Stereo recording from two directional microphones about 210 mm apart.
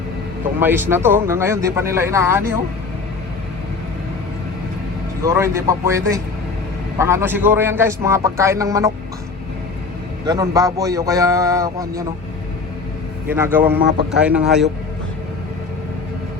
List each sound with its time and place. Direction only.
0.6 s speech: 10° right (ahead or behind)
5.2 s speech: 15° right (ahead or behind)
10.2 s speech: 15° right (ahead or behind)
13.2 s a man's voice: 10° right (ahead or behind)